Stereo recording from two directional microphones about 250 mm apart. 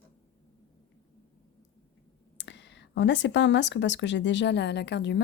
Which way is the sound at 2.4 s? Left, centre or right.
Left.